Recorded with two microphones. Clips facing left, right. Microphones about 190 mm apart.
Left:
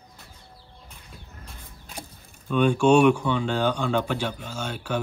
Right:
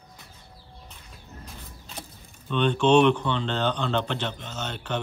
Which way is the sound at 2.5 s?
10° left (ahead or behind).